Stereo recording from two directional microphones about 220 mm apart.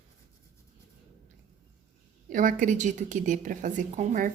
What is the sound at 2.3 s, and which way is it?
A woman's voice, 35° right (ahead or behind).